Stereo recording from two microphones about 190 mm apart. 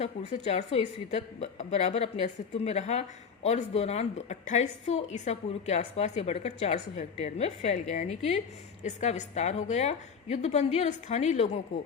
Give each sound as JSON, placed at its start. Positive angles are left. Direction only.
{"t": 0.0, "sound": "a woman's voice", "side_deg": 35}